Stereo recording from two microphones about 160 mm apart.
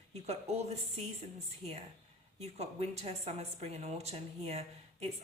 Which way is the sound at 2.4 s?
40° right (ahead or behind).